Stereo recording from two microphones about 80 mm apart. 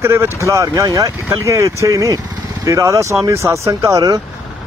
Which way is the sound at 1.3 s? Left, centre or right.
Right.